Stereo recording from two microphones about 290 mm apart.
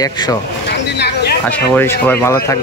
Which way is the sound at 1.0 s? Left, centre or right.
Left.